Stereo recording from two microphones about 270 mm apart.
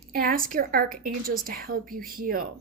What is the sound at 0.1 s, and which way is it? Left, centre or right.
A woman's voice, right.